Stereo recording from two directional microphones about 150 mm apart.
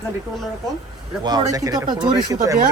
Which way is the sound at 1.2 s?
25° right (ahead or behind).